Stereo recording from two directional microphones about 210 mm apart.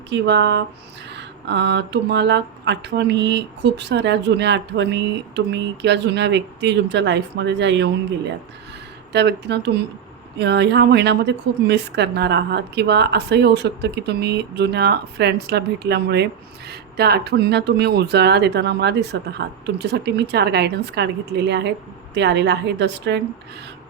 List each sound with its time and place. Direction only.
0.1 s speech: 55° right (ahead or behind)
9.1 s a woman's voice: 55° right (ahead or behind)